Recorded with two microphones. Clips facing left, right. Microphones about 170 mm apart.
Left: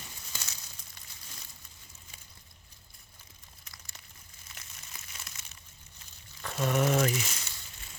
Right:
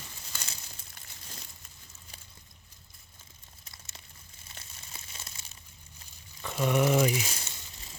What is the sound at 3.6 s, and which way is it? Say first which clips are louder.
Crumpling: right 2 dB; 30° right (ahead or behind).